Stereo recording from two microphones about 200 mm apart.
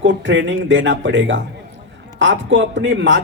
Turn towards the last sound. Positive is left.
turn(degrees=-65)  # may be behind; listen again after turning